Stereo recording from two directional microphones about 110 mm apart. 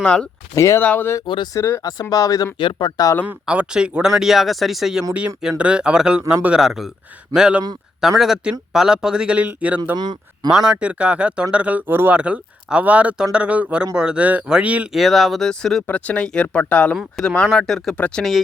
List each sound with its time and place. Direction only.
0.0 s speech: 10° left (ahead or behind)
0.5 s speech: 25° left (ahead or behind)
1.8 s speech: 35° left (ahead or behind)
2.6 s speech: 45° left (ahead or behind)
3.2 s speech: 10° right (ahead or behind)
10.0 s speech: 40° right (ahead or behind)
10.5 s speech: 5° right (ahead or behind)
14.9 s speech: centre (ahead or behind)